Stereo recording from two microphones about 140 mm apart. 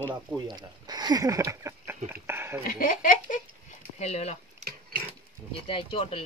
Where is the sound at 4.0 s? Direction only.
50° left (ahead or behind).